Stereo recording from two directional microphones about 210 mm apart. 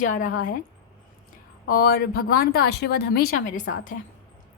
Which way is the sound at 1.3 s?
45° left (ahead or behind).